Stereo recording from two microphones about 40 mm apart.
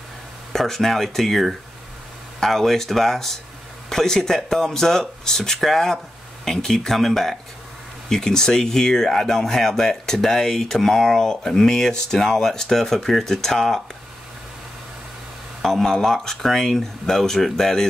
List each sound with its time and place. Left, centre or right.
0.5 s speech: centre
15.6 s speech: centre